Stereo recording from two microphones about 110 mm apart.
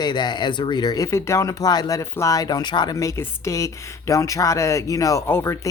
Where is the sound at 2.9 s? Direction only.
30° left (ahead or behind).